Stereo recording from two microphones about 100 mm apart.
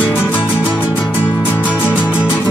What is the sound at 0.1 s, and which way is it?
Music, 20° left (ahead or behind).